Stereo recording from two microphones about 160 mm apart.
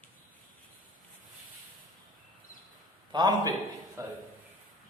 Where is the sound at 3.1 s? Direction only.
25° right (ahead or behind).